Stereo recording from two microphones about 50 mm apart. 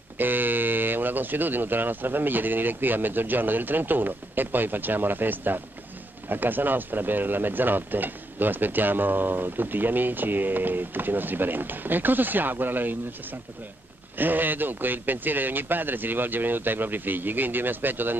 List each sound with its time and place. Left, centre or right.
0.2 s speech: right